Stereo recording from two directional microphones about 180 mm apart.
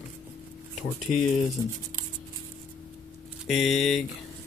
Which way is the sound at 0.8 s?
45° left (ahead or behind).